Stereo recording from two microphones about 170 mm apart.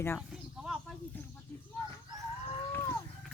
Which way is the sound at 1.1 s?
10° left (ahead or behind).